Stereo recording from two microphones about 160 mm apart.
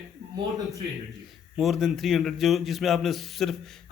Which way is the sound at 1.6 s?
Centre (ahead or behind).